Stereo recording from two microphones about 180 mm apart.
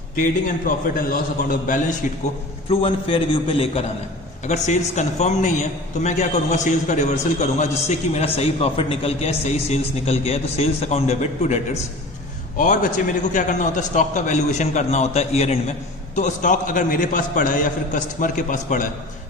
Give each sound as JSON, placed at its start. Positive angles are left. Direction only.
{"t": 0.9, "sound": "a man's voice", "side_deg": 50}
{"t": 2.6, "sound": "a man's voice", "side_deg": 30}